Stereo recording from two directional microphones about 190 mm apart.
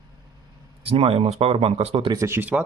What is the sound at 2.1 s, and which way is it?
Speech, 15° right (ahead or behind).